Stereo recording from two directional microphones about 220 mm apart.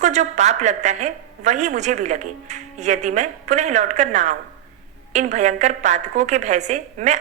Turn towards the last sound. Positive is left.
turn(degrees=-30)  # may be behind; listen again after turning